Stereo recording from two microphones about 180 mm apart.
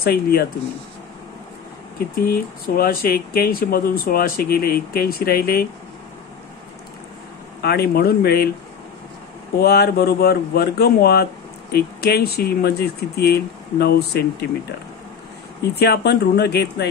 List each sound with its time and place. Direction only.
0.0 s speech: 60° left (ahead or behind)
2.0 s speech: 55° left (ahead or behind)
7.6 s speech: 60° left (ahead or behind)
9.6 s speech: 60° left (ahead or behind)
15.8 s speech: 65° left (ahead or behind)